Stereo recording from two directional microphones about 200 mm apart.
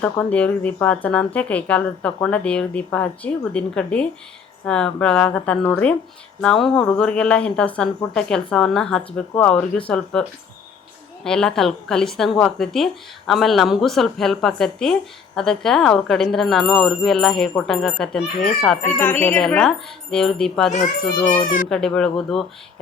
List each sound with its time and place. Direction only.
0.0 s speech: 5° left (ahead or behind)
21.4 s speech: 40° left (ahead or behind)
21.7 s speech: 5° left (ahead or behind)